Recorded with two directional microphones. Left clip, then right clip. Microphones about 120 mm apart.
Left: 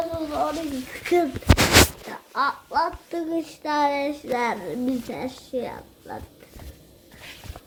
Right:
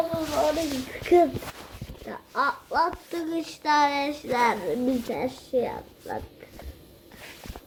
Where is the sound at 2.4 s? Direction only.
35° left (ahead or behind).